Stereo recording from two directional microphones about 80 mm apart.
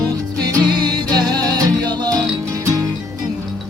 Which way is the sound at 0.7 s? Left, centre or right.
Right.